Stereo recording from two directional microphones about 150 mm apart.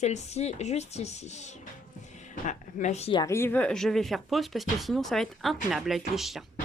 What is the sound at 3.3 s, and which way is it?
Speech, 10° left (ahead or behind).